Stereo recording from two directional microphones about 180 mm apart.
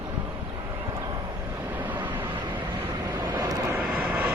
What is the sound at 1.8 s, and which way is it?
Vehicle, 10° right (ahead or behind).